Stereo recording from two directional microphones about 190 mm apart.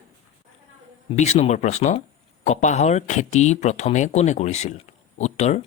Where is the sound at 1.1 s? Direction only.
35° left (ahead or behind).